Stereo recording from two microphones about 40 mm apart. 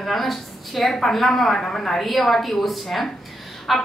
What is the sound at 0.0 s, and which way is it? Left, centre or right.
A woman's voice, centre.